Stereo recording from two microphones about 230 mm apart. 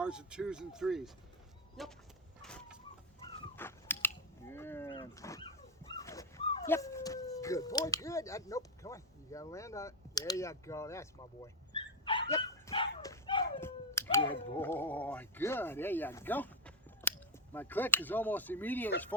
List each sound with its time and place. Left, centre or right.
0.0 s speech: centre
2.4 s chicken: centre
3.5 s biting: centre
4.9 s dog: centre
12.3 s a sound: centre
13.6 s cat: centre
14.2 s speech: left
14.6 s speech: centre